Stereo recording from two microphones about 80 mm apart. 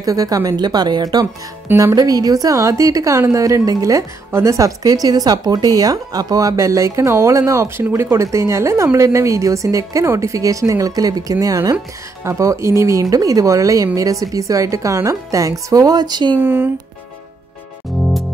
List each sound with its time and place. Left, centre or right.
0.0 s a woman's voice: right
12.2 s a woman's voice: right
16.3 s speech: right